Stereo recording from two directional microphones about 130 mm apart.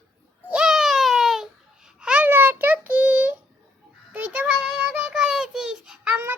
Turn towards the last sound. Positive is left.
turn(degrees=-5)  # may be behind; listen again after turning